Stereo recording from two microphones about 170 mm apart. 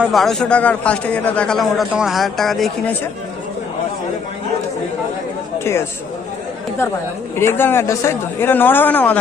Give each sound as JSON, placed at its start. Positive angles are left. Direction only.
{"t": 0.0, "sound": "a man's voice", "side_deg": 0}
{"t": 5.5, "sound": "speech", "side_deg": 15}
{"t": 7.3, "sound": "speech", "side_deg": 15}